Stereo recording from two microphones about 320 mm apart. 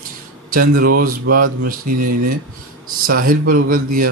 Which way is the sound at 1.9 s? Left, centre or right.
Right.